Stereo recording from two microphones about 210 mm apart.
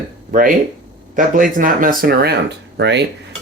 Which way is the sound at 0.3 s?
40° right (ahead or behind).